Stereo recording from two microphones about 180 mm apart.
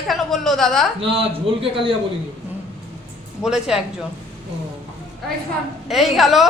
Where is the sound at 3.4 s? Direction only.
5° right (ahead or behind).